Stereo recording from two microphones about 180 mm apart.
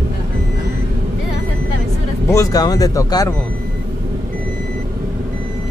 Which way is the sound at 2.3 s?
20° left (ahead or behind).